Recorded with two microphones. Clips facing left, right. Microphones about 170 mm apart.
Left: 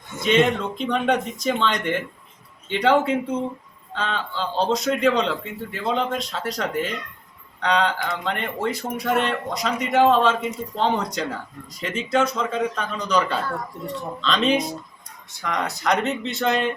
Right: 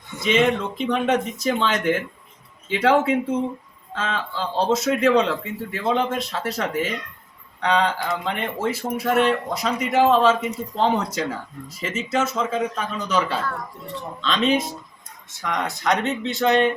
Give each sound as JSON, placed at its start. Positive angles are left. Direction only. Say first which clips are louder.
{"t": 0.2, "sound": "speech", "louder": "even", "side_deg": 0}